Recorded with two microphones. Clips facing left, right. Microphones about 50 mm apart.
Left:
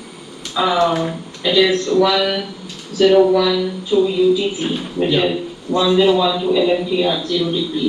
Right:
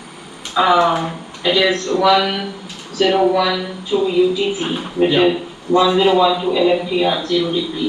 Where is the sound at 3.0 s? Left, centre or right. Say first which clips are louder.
Left 3 dB; right.